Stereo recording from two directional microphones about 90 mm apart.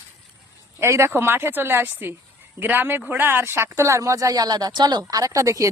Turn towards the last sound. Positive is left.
turn(degrees=-35)  # may be behind; listen again after turning